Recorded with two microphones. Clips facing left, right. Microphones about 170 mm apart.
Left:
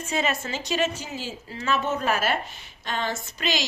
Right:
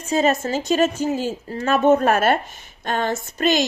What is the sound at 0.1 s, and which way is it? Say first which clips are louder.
Speech: right 9 dB; 40° right (ahead or behind).